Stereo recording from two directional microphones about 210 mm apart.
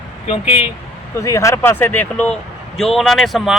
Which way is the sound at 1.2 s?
15° left (ahead or behind).